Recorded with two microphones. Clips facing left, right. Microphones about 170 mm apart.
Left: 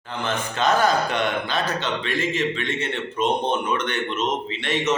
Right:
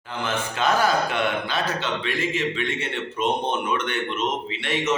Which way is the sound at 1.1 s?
5° right (ahead or behind).